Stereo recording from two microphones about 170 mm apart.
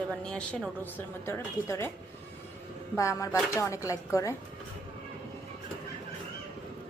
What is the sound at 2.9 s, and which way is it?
A woman's voice, 15° left (ahead or behind).